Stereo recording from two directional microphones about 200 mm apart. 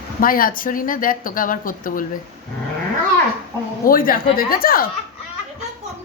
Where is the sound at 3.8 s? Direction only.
45° left (ahead or behind).